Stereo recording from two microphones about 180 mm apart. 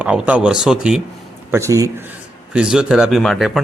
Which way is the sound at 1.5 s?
15° right (ahead or behind).